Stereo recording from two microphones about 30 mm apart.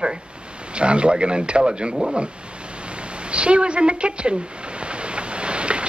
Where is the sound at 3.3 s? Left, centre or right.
Right.